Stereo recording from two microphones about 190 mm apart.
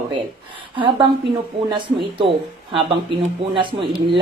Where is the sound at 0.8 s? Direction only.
25° right (ahead or behind).